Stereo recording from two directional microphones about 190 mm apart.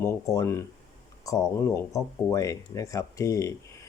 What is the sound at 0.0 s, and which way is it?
Speech, 15° left (ahead or behind).